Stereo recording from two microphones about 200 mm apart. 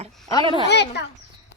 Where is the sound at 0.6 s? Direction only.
60° left (ahead or behind).